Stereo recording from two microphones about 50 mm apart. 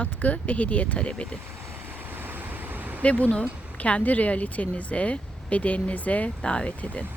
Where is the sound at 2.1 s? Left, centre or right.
Right.